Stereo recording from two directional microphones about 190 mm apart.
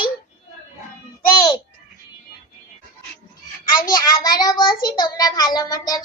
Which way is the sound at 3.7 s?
45° left (ahead or behind).